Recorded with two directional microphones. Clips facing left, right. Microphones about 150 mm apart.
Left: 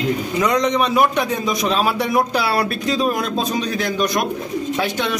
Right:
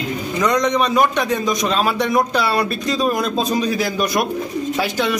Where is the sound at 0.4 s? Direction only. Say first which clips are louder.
Right 1 dB; 5° left (ahead or behind).